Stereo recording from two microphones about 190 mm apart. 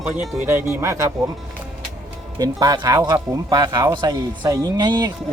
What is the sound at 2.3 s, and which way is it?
Speech, 20° right (ahead or behind).